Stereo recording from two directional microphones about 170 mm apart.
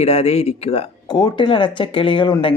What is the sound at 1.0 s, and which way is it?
Speech, 25° left (ahead or behind).